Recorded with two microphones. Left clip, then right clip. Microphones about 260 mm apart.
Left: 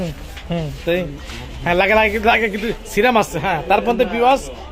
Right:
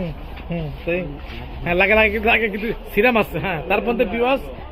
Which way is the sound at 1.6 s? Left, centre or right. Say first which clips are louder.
Left 1 dB; centre.